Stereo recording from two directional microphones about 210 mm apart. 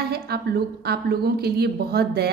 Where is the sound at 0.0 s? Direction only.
50° right (ahead or behind).